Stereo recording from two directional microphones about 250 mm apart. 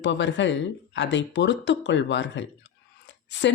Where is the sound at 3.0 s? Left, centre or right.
Left.